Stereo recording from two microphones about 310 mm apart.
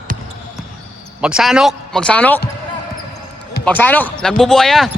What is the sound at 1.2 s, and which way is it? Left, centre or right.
Speech, centre.